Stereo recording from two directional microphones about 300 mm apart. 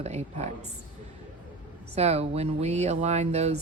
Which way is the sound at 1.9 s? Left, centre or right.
Right.